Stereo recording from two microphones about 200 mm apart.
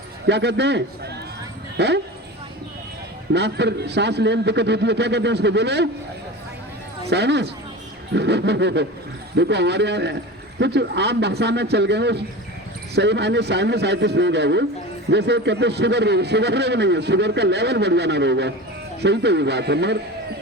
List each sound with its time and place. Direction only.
0.3 s a man's voice: 60° right (ahead or behind)
3.3 s a man's voice: 60° right (ahead or behind)
7.1 s a man's voice: 60° right (ahead or behind)